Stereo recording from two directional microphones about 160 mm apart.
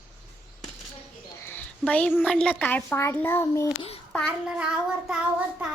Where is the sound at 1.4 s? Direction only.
10° left (ahead or behind).